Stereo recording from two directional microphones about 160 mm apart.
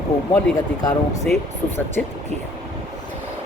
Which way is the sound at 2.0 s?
5° left (ahead or behind).